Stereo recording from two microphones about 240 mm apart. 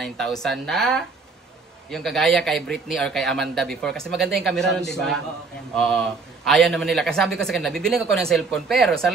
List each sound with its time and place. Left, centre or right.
0.0 s a man's voice: centre